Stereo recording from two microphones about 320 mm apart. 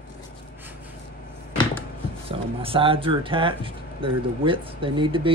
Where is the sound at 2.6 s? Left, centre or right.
Centre.